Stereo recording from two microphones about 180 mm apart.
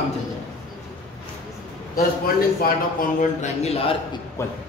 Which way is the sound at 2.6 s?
50° left (ahead or behind).